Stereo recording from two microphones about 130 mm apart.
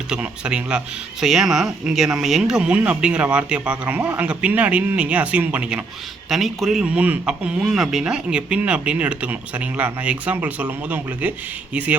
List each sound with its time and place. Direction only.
0.1 s speech: 5° right (ahead or behind)